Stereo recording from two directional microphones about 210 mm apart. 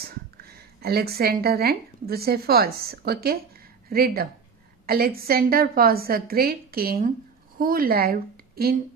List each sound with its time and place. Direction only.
0.0 s a woman's voice: 50° right (ahead or behind)